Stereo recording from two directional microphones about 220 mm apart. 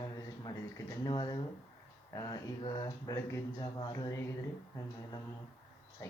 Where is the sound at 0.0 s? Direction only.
15° left (ahead or behind).